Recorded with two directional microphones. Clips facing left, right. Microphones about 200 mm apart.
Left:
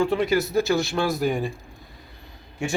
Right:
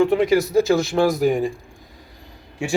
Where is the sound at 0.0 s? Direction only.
15° right (ahead or behind).